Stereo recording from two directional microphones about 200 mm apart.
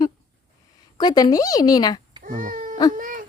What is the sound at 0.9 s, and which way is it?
A woman's voice, 20° left (ahead or behind).